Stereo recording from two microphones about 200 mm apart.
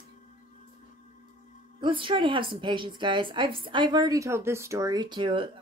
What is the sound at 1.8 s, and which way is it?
A woman's voice, 25° right (ahead or behind).